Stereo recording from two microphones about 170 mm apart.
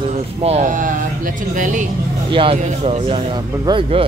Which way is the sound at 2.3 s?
35° right (ahead or behind).